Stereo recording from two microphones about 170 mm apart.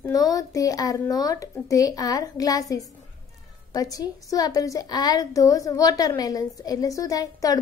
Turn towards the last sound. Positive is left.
turn(degrees=20)  # may be behind; listen again after turning